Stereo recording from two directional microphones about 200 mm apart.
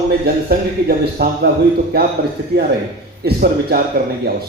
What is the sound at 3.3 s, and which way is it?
Speech, 45° right (ahead or behind).